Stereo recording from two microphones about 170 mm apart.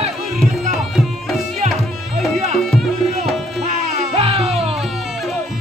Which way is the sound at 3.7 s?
35° right (ahead or behind).